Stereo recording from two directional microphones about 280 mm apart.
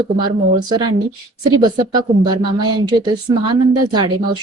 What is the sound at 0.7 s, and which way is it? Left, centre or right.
A woman's voice, centre.